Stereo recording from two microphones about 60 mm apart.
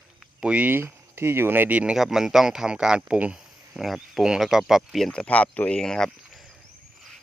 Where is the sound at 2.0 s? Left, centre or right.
Centre.